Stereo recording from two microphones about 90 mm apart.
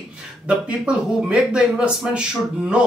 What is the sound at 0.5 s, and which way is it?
Speech, 10° right (ahead or behind).